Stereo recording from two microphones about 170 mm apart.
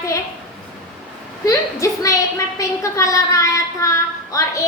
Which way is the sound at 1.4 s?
20° left (ahead or behind).